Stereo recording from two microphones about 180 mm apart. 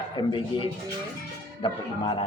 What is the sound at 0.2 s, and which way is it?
A woman's voice, 25° left (ahead or behind).